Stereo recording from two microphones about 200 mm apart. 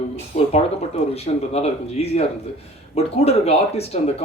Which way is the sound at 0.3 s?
35° left (ahead or behind).